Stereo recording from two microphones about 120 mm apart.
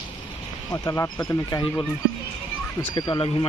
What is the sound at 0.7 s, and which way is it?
Speech, 25° left (ahead or behind).